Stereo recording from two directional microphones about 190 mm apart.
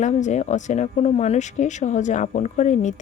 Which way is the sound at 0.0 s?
40° left (ahead or behind).